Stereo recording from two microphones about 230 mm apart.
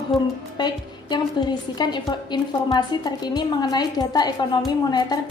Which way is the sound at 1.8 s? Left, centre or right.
Centre.